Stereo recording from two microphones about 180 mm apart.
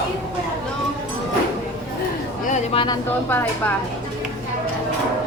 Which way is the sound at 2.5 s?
30° left (ahead or behind).